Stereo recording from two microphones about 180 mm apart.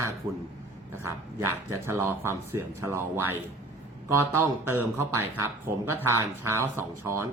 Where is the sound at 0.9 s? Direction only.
15° right (ahead or behind).